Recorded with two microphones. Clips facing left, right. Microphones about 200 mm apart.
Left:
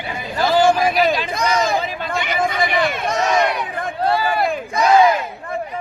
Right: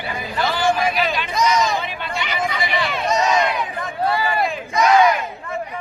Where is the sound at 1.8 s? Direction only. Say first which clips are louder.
Left 3 dB; 40° left (ahead or behind); by 3.5 s 55° left (ahead or behind).